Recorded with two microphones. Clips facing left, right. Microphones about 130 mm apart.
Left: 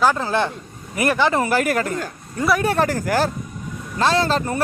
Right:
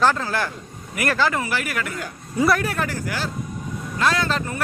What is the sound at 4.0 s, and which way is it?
Speech, 30° left (ahead or behind).